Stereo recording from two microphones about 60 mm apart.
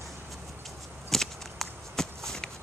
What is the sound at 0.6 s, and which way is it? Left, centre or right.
Walk, centre.